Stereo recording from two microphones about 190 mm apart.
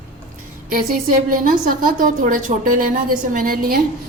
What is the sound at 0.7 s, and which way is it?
A woman's voice, 45° right (ahead or behind).